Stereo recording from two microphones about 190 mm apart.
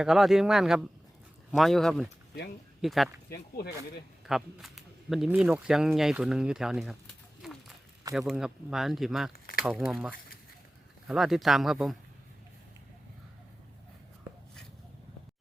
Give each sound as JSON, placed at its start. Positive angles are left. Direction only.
{"t": 0.0, "sound": "speech", "side_deg": 0}
{"t": 3.2, "sound": "speech", "side_deg": 55}
{"t": 4.3, "sound": "speech", "side_deg": 0}
{"t": 7.4, "sound": "run", "side_deg": 0}
{"t": 8.3, "sound": "speech", "side_deg": 0}
{"t": 9.3, "sound": "a sound", "side_deg": 50}
{"t": 9.6, "sound": "speech", "side_deg": 0}